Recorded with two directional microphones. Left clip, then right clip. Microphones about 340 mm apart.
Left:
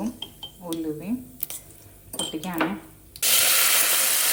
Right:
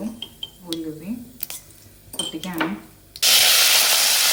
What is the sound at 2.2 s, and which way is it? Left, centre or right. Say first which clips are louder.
Speech: right 2 dB; centre.